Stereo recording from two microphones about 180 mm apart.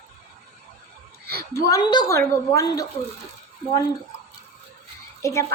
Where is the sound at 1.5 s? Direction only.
20° left (ahead or behind).